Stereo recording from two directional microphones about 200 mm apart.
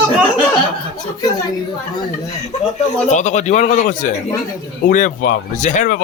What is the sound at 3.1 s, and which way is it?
Speech, 35° left (ahead or behind).